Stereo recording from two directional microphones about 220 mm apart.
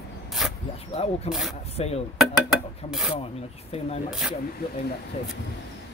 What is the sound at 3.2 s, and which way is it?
Speech, 30° left (ahead or behind).